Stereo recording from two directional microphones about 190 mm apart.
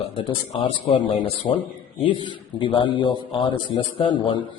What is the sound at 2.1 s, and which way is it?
Speech, 25° right (ahead or behind).